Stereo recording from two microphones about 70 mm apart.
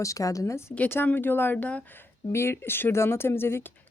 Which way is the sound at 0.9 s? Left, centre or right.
Left.